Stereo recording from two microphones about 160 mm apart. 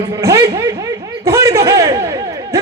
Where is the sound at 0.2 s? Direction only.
20° right (ahead or behind).